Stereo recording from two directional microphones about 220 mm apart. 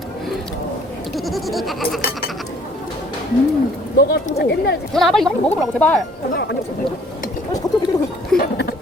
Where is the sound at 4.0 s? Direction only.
45° left (ahead or behind).